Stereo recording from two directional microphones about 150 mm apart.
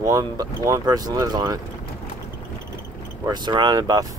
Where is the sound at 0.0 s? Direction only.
25° right (ahead or behind).